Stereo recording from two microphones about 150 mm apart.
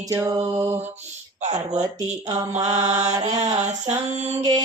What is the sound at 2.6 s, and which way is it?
Mantra, 50° right (ahead or behind).